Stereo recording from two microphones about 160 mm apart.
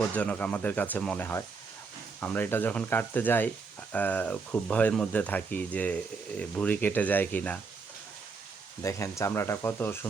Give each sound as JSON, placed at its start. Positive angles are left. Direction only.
{"t": 0.1, "sound": "speech", "side_deg": 10}
{"t": 8.8, "sound": "speech", "side_deg": 20}